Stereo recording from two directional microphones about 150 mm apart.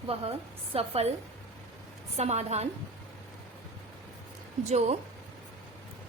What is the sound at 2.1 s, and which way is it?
Speech, 45° right (ahead or behind).